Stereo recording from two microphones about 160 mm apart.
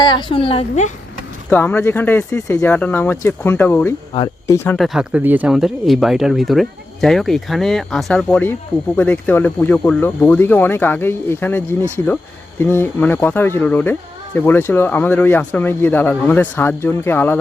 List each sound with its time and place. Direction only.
0.0 s a woman's voice: 30° left (ahead or behind)
1.5 s speech: 10° left (ahead or behind)
4.8 s speech: 5° right (ahead or behind); by 17.4 s 10° left (ahead or behind)